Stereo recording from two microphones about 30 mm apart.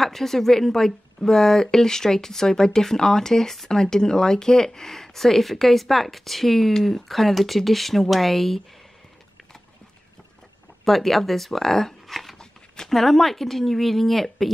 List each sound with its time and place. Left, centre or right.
0.0 s speech: centre
10.9 s speech: centre